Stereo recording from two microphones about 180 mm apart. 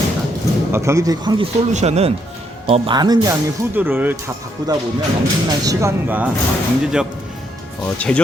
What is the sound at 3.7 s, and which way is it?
Speech, 10° right (ahead or behind).